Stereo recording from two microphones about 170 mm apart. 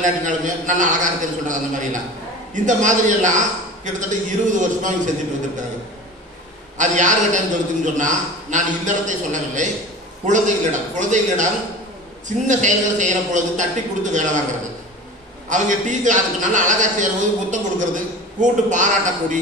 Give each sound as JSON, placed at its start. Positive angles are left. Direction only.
{"t": 0.0, "sound": "a man's voice", "side_deg": -50}
{"t": 6.8, "sound": "a man's voice", "side_deg": -45}
{"t": 15.5, "sound": "a man's voice", "side_deg": -45}